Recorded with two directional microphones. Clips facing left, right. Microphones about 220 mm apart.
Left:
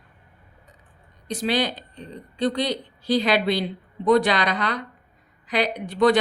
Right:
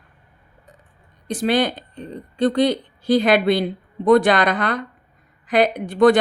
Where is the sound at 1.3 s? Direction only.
50° right (ahead or behind).